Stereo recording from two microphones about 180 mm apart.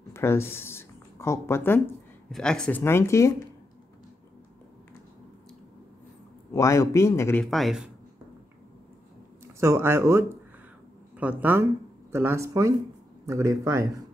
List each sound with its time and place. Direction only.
0.1 s speech: 15° left (ahead or behind)
6.5 s speech: 15° left (ahead or behind)
7.4 s speech: centre (ahead or behind)
9.6 s speech: 15° right (ahead or behind)